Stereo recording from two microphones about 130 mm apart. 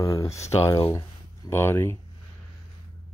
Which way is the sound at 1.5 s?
20° left (ahead or behind).